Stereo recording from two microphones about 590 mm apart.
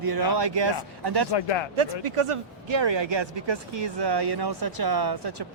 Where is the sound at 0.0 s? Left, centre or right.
Right.